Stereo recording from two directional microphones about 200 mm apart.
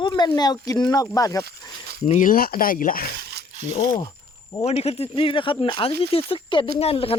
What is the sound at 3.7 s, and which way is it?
Speech, 25° left (ahead or behind).